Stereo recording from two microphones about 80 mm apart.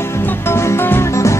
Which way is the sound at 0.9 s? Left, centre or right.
Left.